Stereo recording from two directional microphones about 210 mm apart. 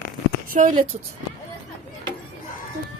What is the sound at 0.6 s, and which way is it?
Speech, 35° right (ahead or behind).